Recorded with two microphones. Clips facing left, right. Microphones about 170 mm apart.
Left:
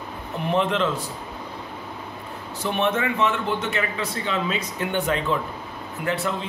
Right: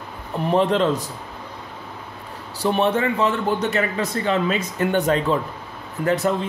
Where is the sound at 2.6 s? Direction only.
35° right (ahead or behind).